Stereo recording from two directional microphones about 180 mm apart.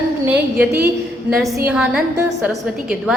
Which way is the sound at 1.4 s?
15° right (ahead or behind).